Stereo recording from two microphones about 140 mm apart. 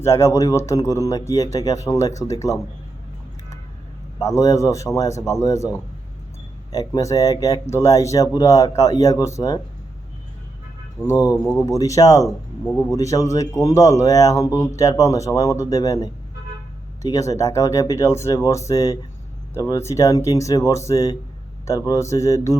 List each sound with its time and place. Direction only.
0.0 s speech: 20° left (ahead or behind)
4.2 s speech: 25° left (ahead or behind)
11.0 s speech: 25° left (ahead or behind)